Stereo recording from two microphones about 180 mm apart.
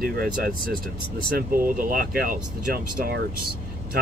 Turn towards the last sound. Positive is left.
turn(degrees=-55)  # may be behind; listen again after turning